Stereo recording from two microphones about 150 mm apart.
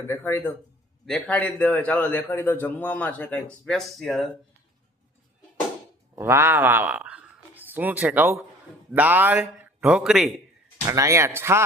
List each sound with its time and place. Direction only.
0.1 s a man's voice: 15° left (ahead or behind); by 4.3 s centre (ahead or behind)
6.1 s a man's voice: 15° right (ahead or behind); by 10.4 s centre (ahead or behind)
10.8 s speech: 20° right (ahead or behind)